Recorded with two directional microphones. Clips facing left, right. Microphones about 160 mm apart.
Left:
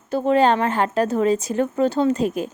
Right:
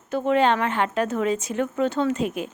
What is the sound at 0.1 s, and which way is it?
Speech, 35° left (ahead or behind).